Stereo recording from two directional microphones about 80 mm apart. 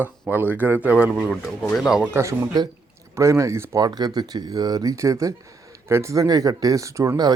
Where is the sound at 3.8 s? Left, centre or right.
Right.